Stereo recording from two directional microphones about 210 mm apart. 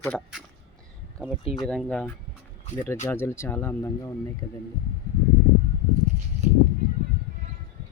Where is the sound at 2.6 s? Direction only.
35° left (ahead or behind).